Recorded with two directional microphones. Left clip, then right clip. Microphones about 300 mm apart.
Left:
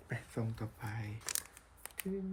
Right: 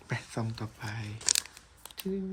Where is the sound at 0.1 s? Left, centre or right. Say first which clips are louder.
Right 6 dB; centre.